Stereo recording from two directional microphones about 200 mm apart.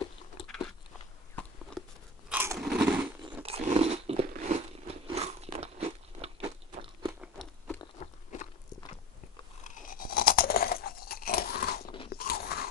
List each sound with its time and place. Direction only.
1.3 s biting: centre (ahead or behind)
2.3 s biting: 10° right (ahead or behind)
2.6 s a sound: 5° right (ahead or behind)
3.4 s biting: 30° right (ahead or behind)
4.3 s crunch: 35° right (ahead or behind)
7.2 s crunch: 5° left (ahead or behind)
9.8 s crunch: 45° left (ahead or behind)
12.1 s biting: 50° left (ahead or behind)